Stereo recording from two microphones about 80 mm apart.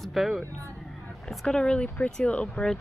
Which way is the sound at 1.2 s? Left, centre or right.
Centre.